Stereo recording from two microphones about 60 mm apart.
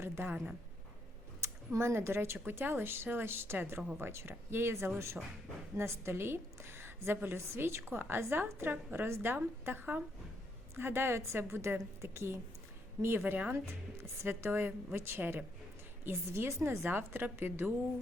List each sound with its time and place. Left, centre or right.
0.2 s a woman's voice: right
1.4 s a woman's voice: right